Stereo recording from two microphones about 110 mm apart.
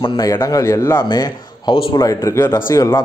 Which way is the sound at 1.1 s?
35° left (ahead or behind).